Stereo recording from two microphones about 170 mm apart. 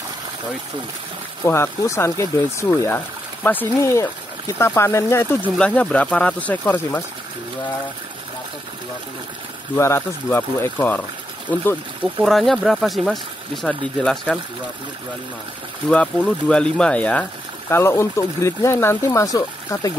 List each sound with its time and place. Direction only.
1.4 s speech: 15° left (ahead or behind)
9.8 s speech: 15° left (ahead or behind)
12.0 s speech: 5° right (ahead or behind)
15.9 s speech: 5° left (ahead or behind)